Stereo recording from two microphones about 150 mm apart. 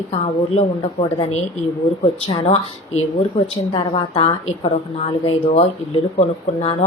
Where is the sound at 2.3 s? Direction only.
40° left (ahead or behind).